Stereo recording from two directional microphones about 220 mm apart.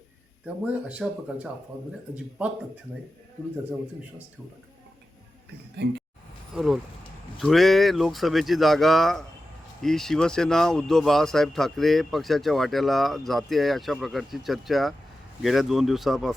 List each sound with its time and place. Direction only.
0.4 s speech: 5° right (ahead or behind)
5.7 s speech: 50° right (ahead or behind)
6.5 s speech: centre (ahead or behind)